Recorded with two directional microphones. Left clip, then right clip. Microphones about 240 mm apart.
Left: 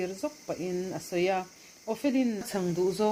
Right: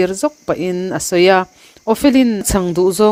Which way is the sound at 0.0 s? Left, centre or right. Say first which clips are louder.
Right 17 dB; right.